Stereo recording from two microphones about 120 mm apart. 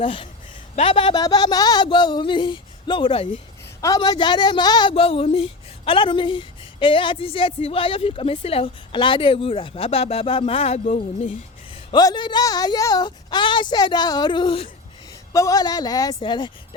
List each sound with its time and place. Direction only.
0.0 s speech: 50° left (ahead or behind)
1.1 s a woman's voice: 35° left (ahead or behind)
3.8 s speech: 30° left (ahead or behind); by 11.3 s 65° left (ahead or behind)
11.9 s a woman's voice: 35° left (ahead or behind)
15.3 s a woman's voice: 30° left (ahead or behind)